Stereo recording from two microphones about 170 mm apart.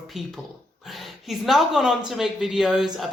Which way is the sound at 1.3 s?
Centre (ahead or behind).